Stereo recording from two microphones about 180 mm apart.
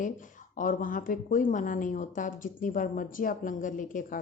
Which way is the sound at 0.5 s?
50° left (ahead or behind).